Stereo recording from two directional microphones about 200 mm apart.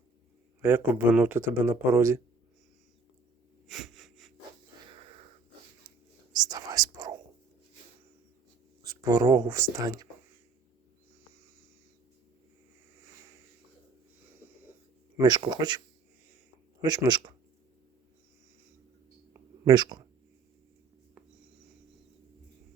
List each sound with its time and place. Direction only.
0.6 s a man's voice: 10° right (ahead or behind)
3.7 s wheeze: centre (ahead or behind)
6.3 s whispering: 20° right (ahead or behind)
8.8 s speech: 15° right (ahead or behind)
15.2 s speech: 20° right (ahead or behind)
16.8 s speech: 20° right (ahead or behind)
19.6 s speech: 20° right (ahead or behind)